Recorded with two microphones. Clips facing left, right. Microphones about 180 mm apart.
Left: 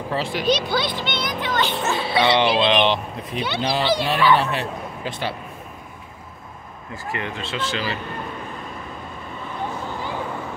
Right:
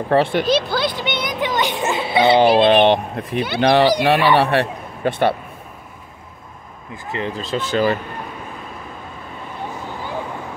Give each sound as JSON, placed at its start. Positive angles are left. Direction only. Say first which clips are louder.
{"t": 0.1, "sound": "speech", "louder": "right 10 dB", "side_deg": -60}
{"t": 0.5, "sound": "speech", "louder": "right 3 dB", "side_deg": 0}
{"t": 1.4, "sound": "music", "louder": "right 3 dB", "side_deg": -15}
{"t": 2.3, "sound": "speech", "louder": "right 8 dB", "side_deg": -50}
{"t": 7.1, "sound": "speech", "louder": "right 5 dB", "side_deg": -30}